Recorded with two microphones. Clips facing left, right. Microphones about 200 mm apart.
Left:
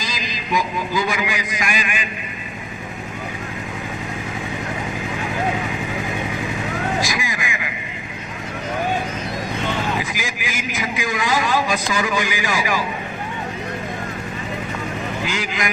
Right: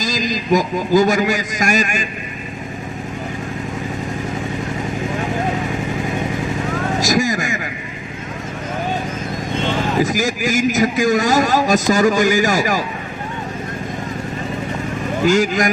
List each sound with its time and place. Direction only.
0.0 s a man's voice: 45° right (ahead or behind)
7.0 s vehicle: 45° right (ahead or behind)
10.0 s a man's voice: 45° right (ahead or behind)
15.2 s a man's voice: 45° right (ahead or behind)